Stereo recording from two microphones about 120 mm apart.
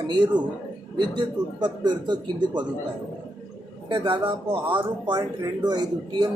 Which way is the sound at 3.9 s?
45° right (ahead or behind).